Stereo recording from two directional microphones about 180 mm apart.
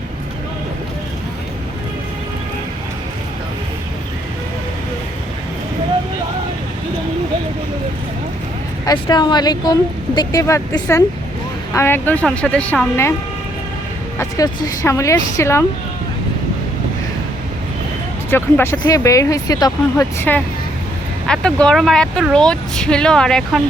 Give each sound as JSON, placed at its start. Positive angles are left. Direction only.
{"t": 8.9, "sound": "speech", "side_deg": 20}
{"t": 14.2, "sound": "speech", "side_deg": 20}
{"t": 18.3, "sound": "speech", "side_deg": 10}